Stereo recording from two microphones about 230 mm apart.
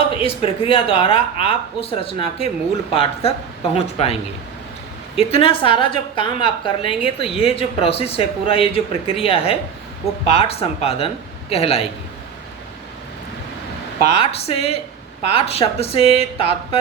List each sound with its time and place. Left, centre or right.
0.2 s a woman's voice: left
14.1 s a woman's voice: left